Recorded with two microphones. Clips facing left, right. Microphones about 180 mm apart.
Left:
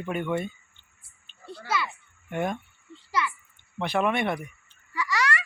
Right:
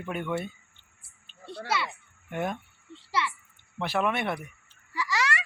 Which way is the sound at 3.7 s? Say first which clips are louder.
Left 2 dB; 5° right (ahead or behind).